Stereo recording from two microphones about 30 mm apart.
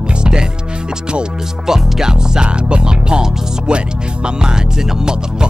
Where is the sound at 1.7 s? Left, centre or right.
Centre.